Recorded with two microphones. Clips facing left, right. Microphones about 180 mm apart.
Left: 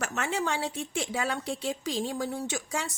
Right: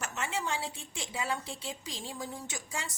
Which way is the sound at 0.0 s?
70° left (ahead or behind).